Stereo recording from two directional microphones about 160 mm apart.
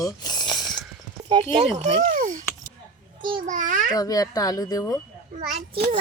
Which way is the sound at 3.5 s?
50° right (ahead or behind).